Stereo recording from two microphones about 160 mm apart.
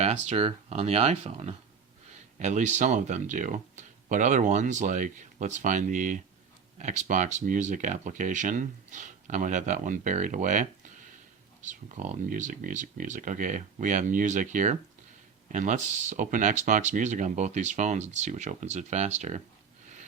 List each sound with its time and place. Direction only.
0.0 s speech: 45° right (ahead or behind)